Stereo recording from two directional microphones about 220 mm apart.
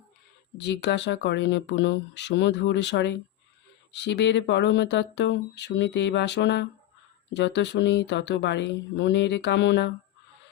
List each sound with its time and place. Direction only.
0.6 s speech: 50° left (ahead or behind)